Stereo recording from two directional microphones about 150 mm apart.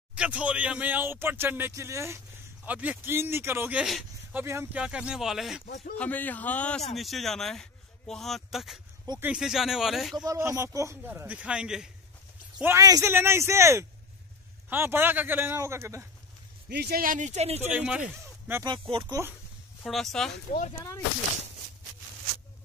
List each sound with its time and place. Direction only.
0.1 s speech: 10° right (ahead or behind)
3.8 s speech: centre (ahead or behind)
4.4 s speech: 20° right (ahead or behind)
4.7 s speech: 5° right (ahead or behind)
5.9 s a man's voice: 10° left (ahead or behind)
10.1 s speech: 20° right (ahead or behind); by 11.9 s 5° right (ahead or behind)
12.5 s speech: 15° right (ahead or behind)
16.6 s speech: 90° right; by 17.6 s 50° right (ahead or behind)
17.6 s speech: 10° right (ahead or behind)
18.6 s speech: 35° right (ahead or behind)
19.8 s speech: centre (ahead or behind)